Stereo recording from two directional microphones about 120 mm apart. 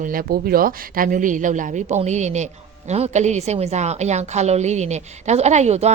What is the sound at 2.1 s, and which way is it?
A woman's voice, 75° right (ahead or behind).